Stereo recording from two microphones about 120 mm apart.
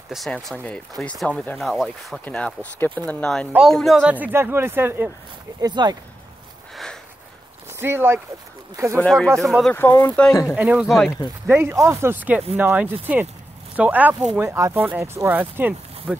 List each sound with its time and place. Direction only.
0.1 s speech: centre (ahead or behind)
2.2 s speech: 10° left (ahead or behind)
4.0 s speech: 15° right (ahead or behind)
5.6 s speech: 35° right (ahead or behind)
6.7 s a sound: 5° left (ahead or behind)
7.8 s speech: 20° right (ahead or behind)
8.9 s speech: 10° left (ahead or behind)
9.7 s speech: 20° left (ahead or behind)
10.4 s speech: 10° right (ahead or behind)
10.9 s speech: centre (ahead or behind)
11.4 s speech: 15° right (ahead or behind)